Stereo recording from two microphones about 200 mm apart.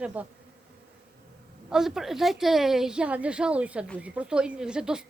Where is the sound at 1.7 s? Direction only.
Centre (ahead or behind).